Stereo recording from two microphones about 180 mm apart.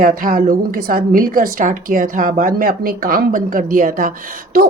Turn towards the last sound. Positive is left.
turn(degrees=-50)  # may be behind; listen again after turning